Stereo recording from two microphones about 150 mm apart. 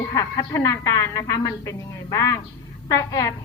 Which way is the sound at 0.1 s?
20° left (ahead or behind).